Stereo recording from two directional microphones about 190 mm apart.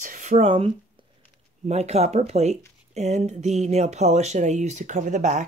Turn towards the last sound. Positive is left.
turn(degrees=-40)  # may be behind; listen again after turning